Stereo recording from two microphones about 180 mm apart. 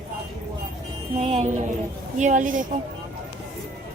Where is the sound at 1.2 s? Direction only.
35° right (ahead or behind).